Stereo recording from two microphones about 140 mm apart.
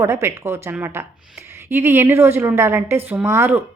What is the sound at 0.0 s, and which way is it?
A woman's voice, 20° right (ahead or behind).